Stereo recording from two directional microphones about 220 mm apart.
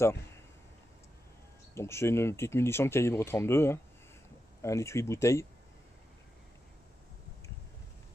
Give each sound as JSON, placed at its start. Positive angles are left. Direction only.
{"t": 1.8, "sound": "speech", "side_deg": 10}